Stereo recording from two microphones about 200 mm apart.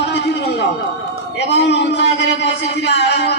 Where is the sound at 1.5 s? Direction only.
60° left (ahead or behind).